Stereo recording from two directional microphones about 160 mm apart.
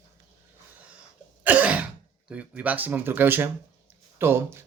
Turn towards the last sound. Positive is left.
turn(degrees=-15)  # may be behind; listen again after turning